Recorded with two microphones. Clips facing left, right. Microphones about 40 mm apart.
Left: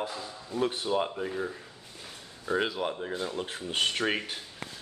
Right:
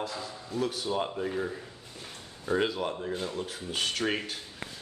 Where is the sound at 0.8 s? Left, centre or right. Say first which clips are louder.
Left 1 dB; centre.